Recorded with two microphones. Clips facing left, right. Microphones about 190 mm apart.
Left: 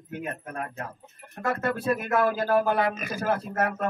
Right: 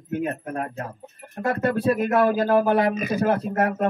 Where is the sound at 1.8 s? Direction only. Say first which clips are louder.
Right 4 dB; 20° right (ahead or behind).